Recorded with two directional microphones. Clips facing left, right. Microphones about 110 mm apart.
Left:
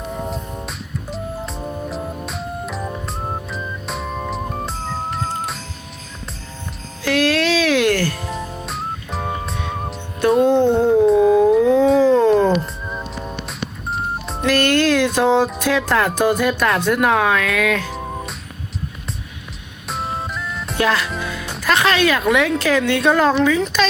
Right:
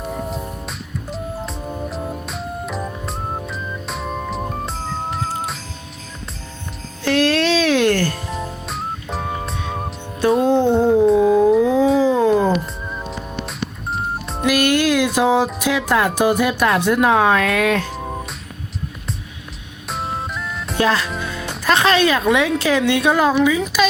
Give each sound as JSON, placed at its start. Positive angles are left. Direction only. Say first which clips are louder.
{"t": 0.1, "sound": "music", "louder": "even", "side_deg": 0}
{"t": 7.0, "sound": "music", "louder": "right 1 dB", "side_deg": -25}
{"t": 8.3, "sound": "music", "louder": "even", "side_deg": 0}
{"t": 10.5, "sound": "a sound", "louder": "even", "side_deg": -10}
{"t": 12.3, "sound": "music", "louder": "left 1 dB", "side_deg": -5}
{"t": 14.4, "sound": "music", "louder": "even", "side_deg": -15}
{"t": 15.5, "sound": "speech", "louder": "even", "side_deg": -15}
{"t": 17.9, "sound": "music", "louder": "even", "side_deg": 0}
{"t": 19.9, "sound": "music", "louder": "even", "side_deg": 0}
{"t": 20.7, "sound": "speech", "louder": "right 1 dB", "side_deg": -25}
{"t": 21.1, "sound": "speech", "louder": "even", "side_deg": 5}
{"t": 21.6, "sound": "speech", "louder": "right 1 dB", "side_deg": -25}